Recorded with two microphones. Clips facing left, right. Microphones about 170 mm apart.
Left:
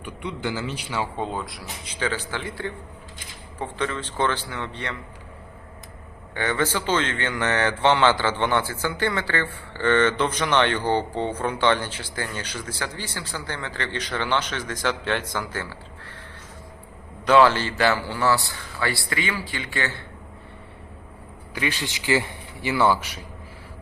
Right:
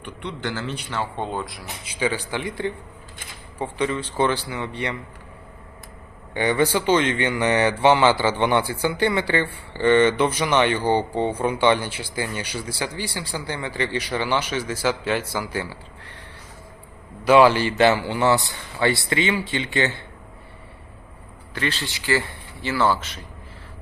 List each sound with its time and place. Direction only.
0.0 s a man's voice: 10° left (ahead or behind)
1.8 s a man's voice: 10° right (ahead or behind)
6.3 s a man's voice: 15° right (ahead or behind)
17.2 s a man's voice: 15° right (ahead or behind)
21.5 s a man's voice: 10° left (ahead or behind)